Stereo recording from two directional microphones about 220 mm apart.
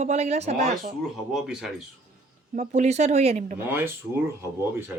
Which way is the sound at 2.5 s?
30° right (ahead or behind).